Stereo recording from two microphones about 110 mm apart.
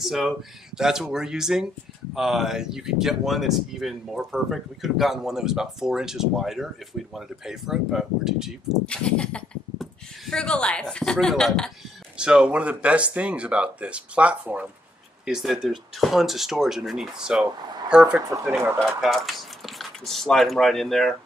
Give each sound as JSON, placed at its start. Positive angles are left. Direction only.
{"t": 0.0, "sound": "speech", "side_deg": 0}
{"t": 8.8, "sound": "speech", "side_deg": 10}
{"t": 12.2, "sound": "speech", "side_deg": -5}
{"t": 18.5, "sound": "speech", "side_deg": -25}
{"t": 18.9, "sound": "speech", "side_deg": 0}